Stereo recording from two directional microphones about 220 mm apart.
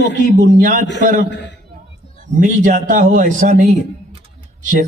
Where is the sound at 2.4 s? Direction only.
35° right (ahead or behind).